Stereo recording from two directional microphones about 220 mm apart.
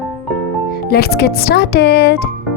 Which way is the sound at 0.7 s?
45° left (ahead or behind).